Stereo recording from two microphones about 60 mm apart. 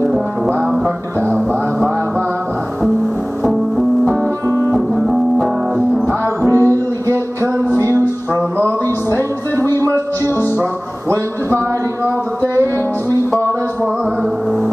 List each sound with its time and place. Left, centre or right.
4.5 s music: left
5.0 s music: centre
6.0 s music: right
8.4 s music: right
9.9 s music: left